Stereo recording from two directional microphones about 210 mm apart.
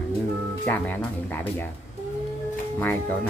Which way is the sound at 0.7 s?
10° left (ahead or behind).